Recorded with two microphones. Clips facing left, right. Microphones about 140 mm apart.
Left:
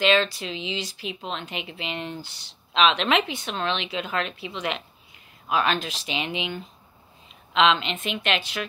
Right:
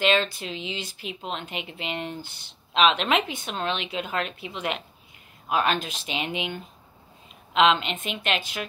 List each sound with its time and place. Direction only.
0.0 s speech: 45° right (ahead or behind)